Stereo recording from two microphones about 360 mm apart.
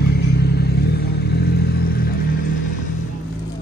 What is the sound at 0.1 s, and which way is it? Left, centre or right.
Vehicle, left.